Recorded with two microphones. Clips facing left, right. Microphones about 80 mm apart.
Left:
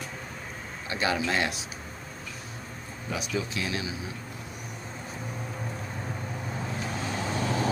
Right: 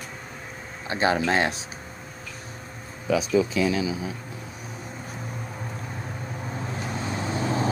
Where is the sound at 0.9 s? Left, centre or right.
Right.